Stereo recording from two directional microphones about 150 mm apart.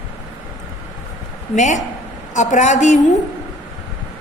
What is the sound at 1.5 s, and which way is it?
A woman's voice, 55° left (ahead or behind).